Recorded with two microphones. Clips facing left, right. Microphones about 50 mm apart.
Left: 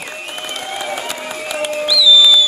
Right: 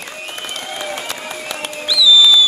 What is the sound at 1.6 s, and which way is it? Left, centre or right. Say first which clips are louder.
Music: left 1 dB; centre.